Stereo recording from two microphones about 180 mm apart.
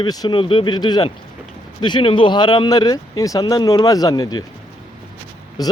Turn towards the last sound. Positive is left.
turn(degrees=20)  # may be behind; listen again after turning